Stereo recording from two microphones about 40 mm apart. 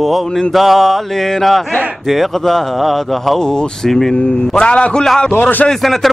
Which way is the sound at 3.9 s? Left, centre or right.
Centre.